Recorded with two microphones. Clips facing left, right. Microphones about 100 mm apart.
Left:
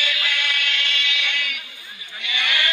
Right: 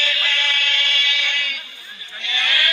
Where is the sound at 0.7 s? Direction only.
40° right (ahead or behind).